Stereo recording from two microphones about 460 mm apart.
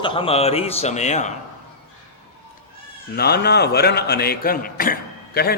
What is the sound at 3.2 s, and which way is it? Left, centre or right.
A man's voice, left.